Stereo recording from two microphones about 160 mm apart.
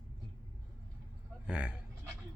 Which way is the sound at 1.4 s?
5° right (ahead or behind).